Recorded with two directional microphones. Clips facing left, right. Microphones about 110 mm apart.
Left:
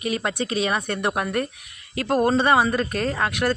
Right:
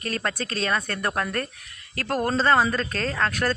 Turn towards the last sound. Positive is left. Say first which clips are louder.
# left 2 dB
turn(degrees=15)  # may be behind; listen again after turning